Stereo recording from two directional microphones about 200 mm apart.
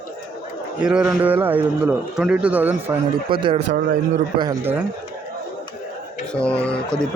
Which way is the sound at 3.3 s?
25° right (ahead or behind).